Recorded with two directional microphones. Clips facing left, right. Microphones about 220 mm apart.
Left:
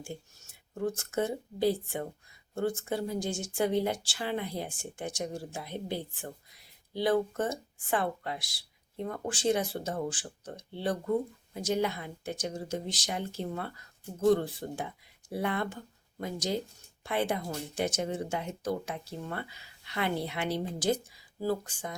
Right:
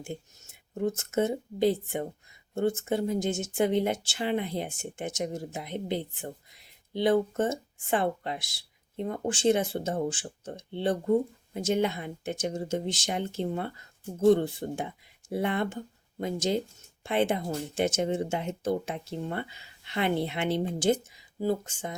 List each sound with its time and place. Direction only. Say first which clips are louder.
0.0 s speech: right 3 dB; 20° right (ahead or behind)